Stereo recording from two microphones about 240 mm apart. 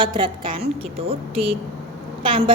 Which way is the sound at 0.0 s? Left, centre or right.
Centre.